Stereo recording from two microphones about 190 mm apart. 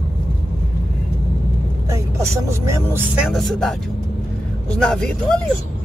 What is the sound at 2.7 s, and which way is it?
Speech, 10° right (ahead or behind).